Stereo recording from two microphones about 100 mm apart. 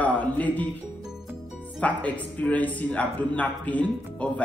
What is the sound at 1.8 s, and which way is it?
Speech, 15° left (ahead or behind).